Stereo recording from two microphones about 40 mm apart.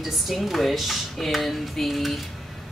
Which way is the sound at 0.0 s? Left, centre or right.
Centre.